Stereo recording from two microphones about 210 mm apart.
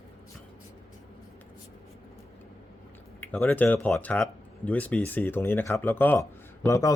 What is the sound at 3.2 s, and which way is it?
Speech, 10° left (ahead or behind).